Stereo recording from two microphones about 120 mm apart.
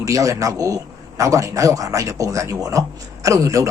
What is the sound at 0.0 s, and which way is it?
A man's voice, 25° right (ahead or behind).